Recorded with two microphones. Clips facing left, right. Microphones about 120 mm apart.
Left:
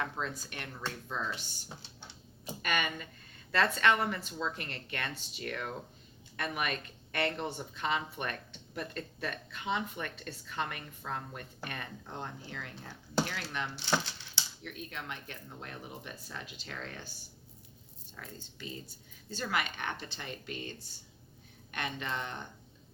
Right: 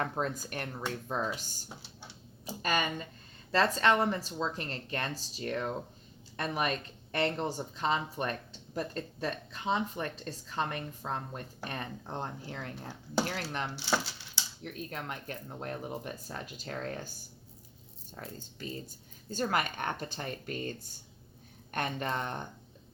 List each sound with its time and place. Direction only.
0.0 s speech: 45° right (ahead or behind)
2.5 s speech: 30° right (ahead or behind)
13.7 s speech: 10° right (ahead or behind)
14.6 s speech: 40° right (ahead or behind)
18.1 s speech: 40° right (ahead or behind)